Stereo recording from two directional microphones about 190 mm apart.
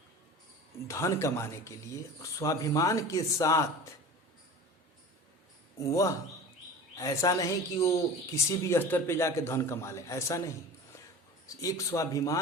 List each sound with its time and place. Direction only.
0.9 s a man's voice: 15° left (ahead or behind)
5.8 s a man's voice: 15° left (ahead or behind)
11.4 s a man's voice: 15° left (ahead or behind)